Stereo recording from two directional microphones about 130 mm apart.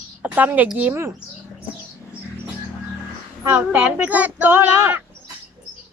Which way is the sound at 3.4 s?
15° right (ahead or behind).